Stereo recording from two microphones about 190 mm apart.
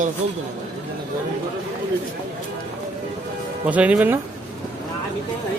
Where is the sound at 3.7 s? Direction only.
5° right (ahead or behind).